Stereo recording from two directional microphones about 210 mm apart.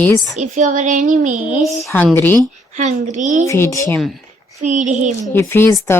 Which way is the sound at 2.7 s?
35° right (ahead or behind).